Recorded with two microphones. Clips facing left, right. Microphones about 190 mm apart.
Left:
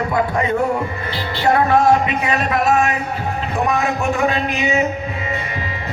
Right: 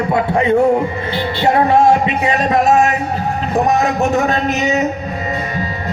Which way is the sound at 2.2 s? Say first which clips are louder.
Right 4 dB; 35° right (ahead or behind).